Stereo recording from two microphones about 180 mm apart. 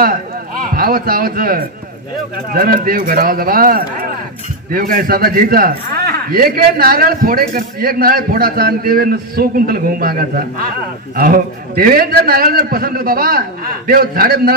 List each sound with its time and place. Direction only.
0.7 s a man's voice: 55° right (ahead or behind)